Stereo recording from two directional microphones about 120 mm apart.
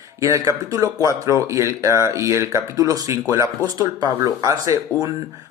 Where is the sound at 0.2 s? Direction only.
25° right (ahead or behind).